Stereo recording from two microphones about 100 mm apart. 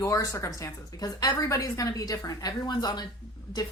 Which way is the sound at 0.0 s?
35° left (ahead or behind).